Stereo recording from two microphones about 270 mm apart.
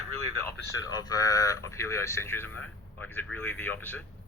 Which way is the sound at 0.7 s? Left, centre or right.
Centre.